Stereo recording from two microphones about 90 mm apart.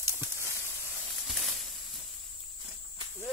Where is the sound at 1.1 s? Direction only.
Centre (ahead or behind).